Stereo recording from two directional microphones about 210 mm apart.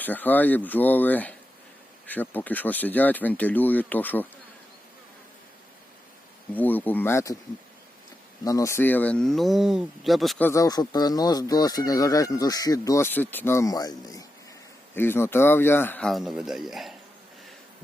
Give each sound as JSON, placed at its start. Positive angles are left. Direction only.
{"t": 0.0, "sound": "speech", "side_deg": 10}
{"t": 6.5, "sound": "speech", "side_deg": 10}
{"t": 8.4, "sound": "speech", "side_deg": 15}